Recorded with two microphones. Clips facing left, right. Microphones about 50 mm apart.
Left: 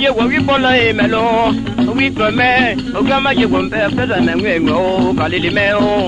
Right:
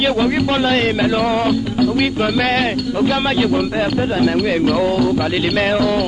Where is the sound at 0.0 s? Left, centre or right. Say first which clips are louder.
Left 3 dB; left.